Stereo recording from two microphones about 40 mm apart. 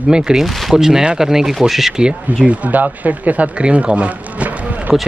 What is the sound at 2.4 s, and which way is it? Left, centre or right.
Speech, right.